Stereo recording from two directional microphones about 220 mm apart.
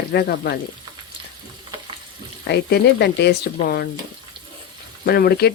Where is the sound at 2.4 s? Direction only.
50° left (ahead or behind).